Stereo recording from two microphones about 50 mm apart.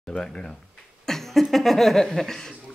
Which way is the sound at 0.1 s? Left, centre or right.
Centre.